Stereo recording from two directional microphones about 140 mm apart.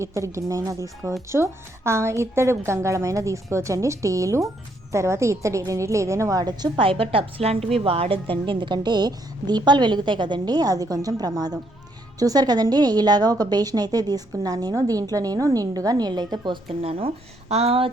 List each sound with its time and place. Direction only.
0.0 s a woman's voice: 20° right (ahead or behind)
16.8 s speech: 45° right (ahead or behind)